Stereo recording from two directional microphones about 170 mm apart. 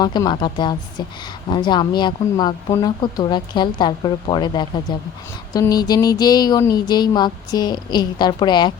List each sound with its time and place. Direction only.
0.0 s speech: 25° left (ahead or behind)